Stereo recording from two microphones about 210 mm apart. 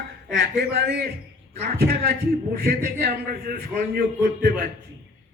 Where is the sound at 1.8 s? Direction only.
45° right (ahead or behind).